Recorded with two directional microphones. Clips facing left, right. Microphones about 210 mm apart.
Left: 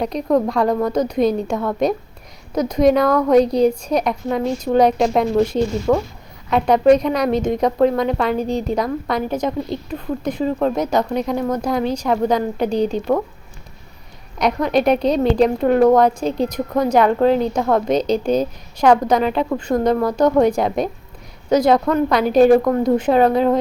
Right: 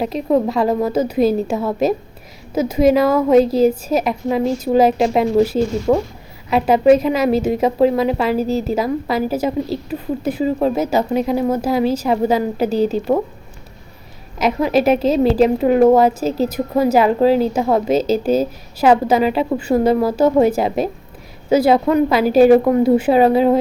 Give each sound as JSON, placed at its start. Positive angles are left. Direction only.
{"t": 0.0, "sound": "a woman's voice", "side_deg": -5}
{"t": 5.9, "sound": "a woman's voice", "side_deg": -15}
{"t": 6.5, "sound": "a woman's voice", "side_deg": -5}
{"t": 14.3, "sound": "a woman's voice", "side_deg": -5}